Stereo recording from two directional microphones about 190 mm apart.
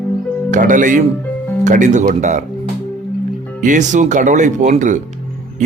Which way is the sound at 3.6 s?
40° right (ahead or behind).